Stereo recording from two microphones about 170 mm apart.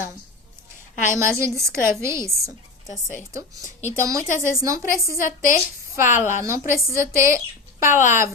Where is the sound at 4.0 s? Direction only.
20° right (ahead or behind).